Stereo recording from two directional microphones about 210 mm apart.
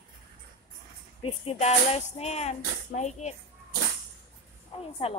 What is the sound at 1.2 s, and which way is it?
Speech, 30° left (ahead or behind).